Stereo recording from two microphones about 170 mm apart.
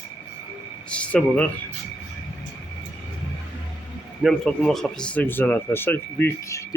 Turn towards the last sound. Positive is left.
turn(degrees=15)  # may be behind; listen again after turning